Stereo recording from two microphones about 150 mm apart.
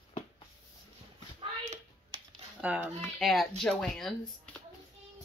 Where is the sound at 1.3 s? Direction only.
40° right (ahead or behind).